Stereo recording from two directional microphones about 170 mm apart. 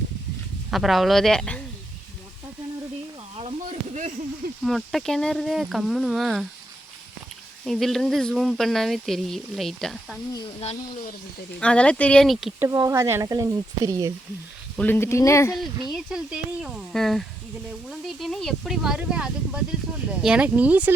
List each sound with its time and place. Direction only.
0.7 s speech: centre (ahead or behind)
3.3 s a sound: 40° right (ahead or behind)
4.6 s speech: centre (ahead or behind)
7.6 s speech: centre (ahead or behind)
11.6 s speech: 5° left (ahead or behind)
12.5 s speech: 20° right (ahead or behind)
14.8 s speech: 10° left (ahead or behind)
15.9 s speech: centre (ahead or behind)